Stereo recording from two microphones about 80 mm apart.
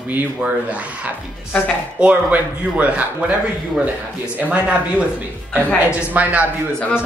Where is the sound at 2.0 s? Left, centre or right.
Centre.